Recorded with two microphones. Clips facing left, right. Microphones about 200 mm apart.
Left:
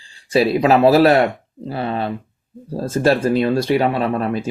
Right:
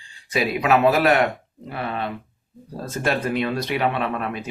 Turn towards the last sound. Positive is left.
turn(degrees=35)  # may be behind; listen again after turning